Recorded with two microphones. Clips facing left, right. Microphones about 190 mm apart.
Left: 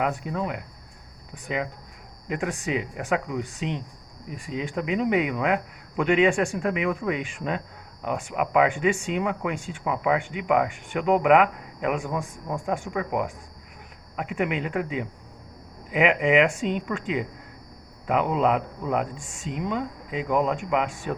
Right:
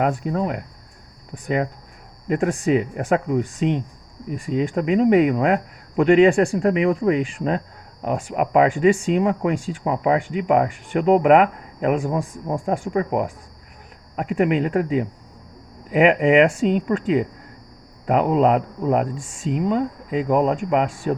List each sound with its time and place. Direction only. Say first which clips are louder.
0.0 s speech: right 5 dB; 40° right (ahead or behind)